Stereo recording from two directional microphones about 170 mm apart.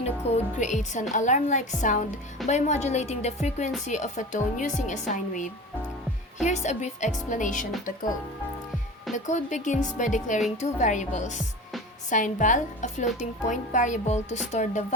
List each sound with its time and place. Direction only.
0.3 s a woman's voice: 40° left (ahead or behind)
9.1 s speech: 45° left (ahead or behind)